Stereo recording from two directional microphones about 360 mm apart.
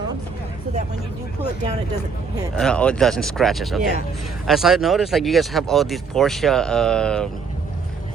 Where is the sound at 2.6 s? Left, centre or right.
Centre.